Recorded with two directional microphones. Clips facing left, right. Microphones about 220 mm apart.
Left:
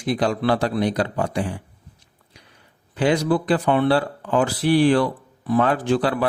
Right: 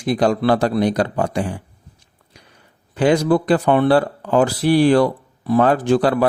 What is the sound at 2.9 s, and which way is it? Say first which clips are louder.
Speech: right 4 dB; 45° right (ahead or behind).